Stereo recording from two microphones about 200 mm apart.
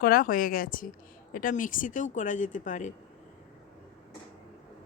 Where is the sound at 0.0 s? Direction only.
45° left (ahead or behind).